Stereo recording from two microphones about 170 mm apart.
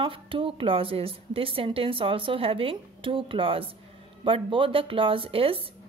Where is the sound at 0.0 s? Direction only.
30° right (ahead or behind).